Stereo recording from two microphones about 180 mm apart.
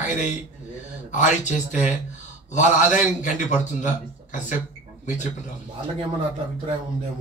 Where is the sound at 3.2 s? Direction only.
40° left (ahead or behind).